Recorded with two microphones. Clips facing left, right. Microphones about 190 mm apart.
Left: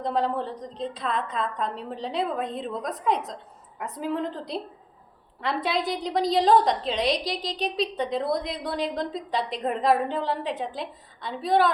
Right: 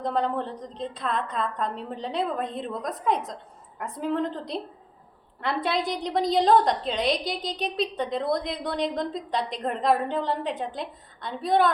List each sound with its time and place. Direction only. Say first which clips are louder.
0.0 s a woman's voice: even; centre (ahead or behind)